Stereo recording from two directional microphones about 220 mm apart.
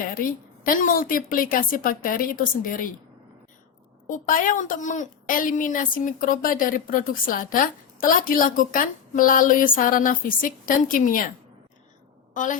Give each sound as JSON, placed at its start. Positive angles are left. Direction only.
{"t": 0.6, "sound": "a woman's voice", "side_deg": 40}
{"t": 4.1, "sound": "a woman's voice", "side_deg": 40}
{"t": 12.3, "sound": "a woman's voice", "side_deg": 35}